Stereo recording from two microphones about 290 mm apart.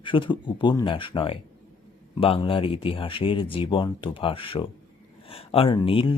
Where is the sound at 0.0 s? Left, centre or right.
Centre.